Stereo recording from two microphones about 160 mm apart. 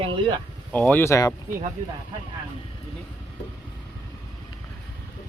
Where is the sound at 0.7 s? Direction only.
10° left (ahead or behind).